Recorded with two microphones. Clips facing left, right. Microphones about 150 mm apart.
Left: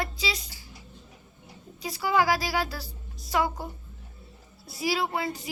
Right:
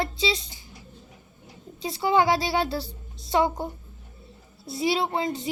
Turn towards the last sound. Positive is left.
turn(degrees=-25)  # may be behind; listen again after turning